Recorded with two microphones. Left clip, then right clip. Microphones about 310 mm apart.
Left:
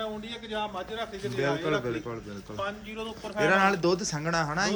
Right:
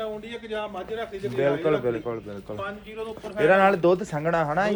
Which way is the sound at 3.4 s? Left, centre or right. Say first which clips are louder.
Right 5 dB; centre.